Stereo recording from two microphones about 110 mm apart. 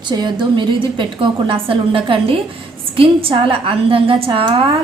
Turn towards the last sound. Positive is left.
turn(degrees=-50)  # may be behind; listen again after turning